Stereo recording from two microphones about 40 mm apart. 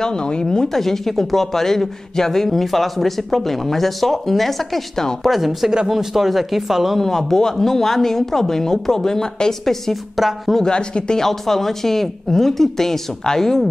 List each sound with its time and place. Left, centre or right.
0.0 s speech: left
0.7 s speech: centre
7.0 s speech: centre
10.1 s speech: centre
10.5 s speech: centre
11.1 s speech: centre